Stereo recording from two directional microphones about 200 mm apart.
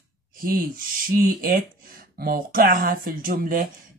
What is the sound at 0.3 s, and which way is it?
Speech, 45° right (ahead or behind).